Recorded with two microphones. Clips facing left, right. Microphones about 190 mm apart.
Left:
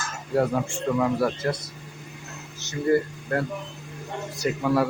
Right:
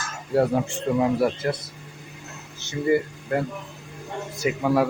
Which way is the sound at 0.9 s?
25° right (ahead or behind).